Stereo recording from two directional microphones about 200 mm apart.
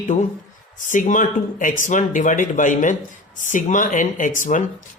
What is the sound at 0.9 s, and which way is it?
Speech, 40° left (ahead or behind).